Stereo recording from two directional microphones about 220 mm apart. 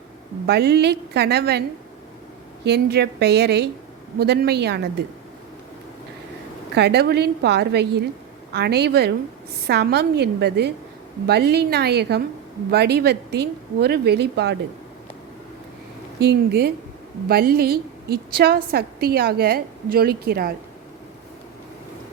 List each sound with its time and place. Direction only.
0.4 s a woman's voice: 45° right (ahead or behind)
2.6 s a woman's voice: 45° right (ahead or behind)
6.7 s a woman's voice: 50° right (ahead or behind)
16.2 s a woman's voice: 50° right (ahead or behind)